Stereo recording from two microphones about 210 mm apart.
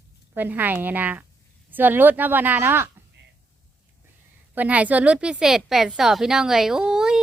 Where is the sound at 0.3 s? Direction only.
10° right (ahead or behind).